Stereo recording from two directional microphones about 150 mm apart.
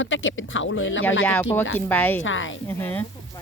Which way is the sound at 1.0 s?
10° left (ahead or behind).